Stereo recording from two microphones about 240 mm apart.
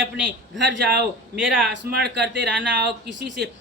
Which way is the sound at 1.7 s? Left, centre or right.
Right.